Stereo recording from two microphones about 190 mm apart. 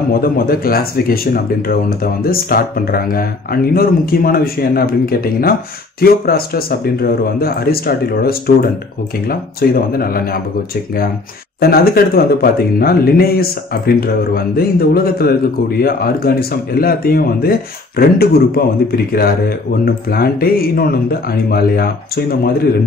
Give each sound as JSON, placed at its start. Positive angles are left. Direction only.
{"t": 0.1, "sound": "speech", "side_deg": 50}
{"t": 11.6, "sound": "speech", "side_deg": 55}
{"t": 19.8, "sound": "speech", "side_deg": 50}